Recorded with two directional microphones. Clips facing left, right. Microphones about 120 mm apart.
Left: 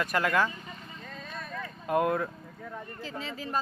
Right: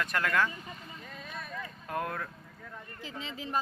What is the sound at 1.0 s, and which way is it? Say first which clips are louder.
Vehicle: left 2 dB; 10° right (ahead or behind).